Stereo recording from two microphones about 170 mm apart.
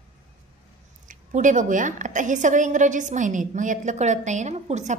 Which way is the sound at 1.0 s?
50° right (ahead or behind).